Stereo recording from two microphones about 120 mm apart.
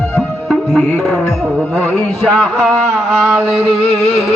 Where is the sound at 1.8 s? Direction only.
10° left (ahead or behind).